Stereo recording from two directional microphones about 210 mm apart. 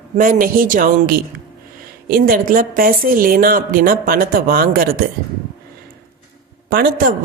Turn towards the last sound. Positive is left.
turn(degrees=-45)  # may be behind; listen again after turning